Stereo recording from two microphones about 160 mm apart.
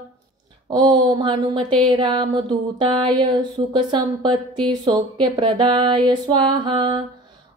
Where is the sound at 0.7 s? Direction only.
30° right (ahead or behind).